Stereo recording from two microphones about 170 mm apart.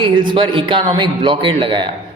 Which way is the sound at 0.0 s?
30° right (ahead or behind).